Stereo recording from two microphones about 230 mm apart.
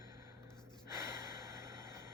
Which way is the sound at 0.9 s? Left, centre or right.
Centre.